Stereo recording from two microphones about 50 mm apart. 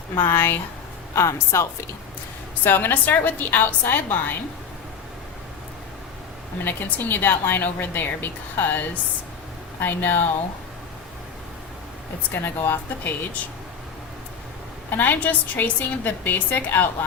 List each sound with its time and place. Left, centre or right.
0.2 s a woman's voice: left
1.1 s speech: left
2.6 s a woman's voice: left
6.7 s a woman's voice: left
9.8 s a woman's voice: left
12.3 s speech: left
14.8 s a woman's voice: left